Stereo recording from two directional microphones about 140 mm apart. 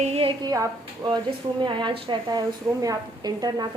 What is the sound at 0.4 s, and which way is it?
A woman's voice, 25° right (ahead or behind).